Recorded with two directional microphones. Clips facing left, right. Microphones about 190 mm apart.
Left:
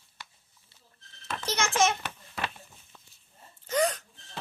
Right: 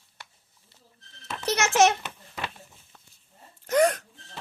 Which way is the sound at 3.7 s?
70° right (ahead or behind).